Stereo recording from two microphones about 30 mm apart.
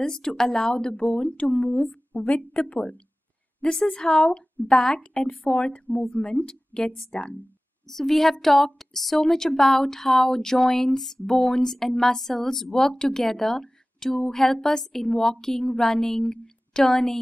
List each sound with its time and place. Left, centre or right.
0.1 s speech: centre
1.3 s a woman's voice: left
3.8 s a woman's voice: left
4.6 s speech: left
5.2 s a woman's voice: left
6.1 s speech: left
7.8 s a woman's voice: centre
12.7 s a woman's voice: left